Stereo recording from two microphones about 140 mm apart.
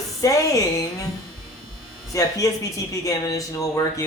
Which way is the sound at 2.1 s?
25° left (ahead or behind).